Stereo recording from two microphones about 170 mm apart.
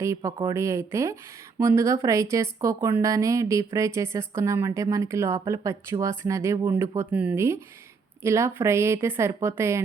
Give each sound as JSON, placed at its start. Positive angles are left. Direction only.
{"t": 0.0, "sound": "speech", "side_deg": -20}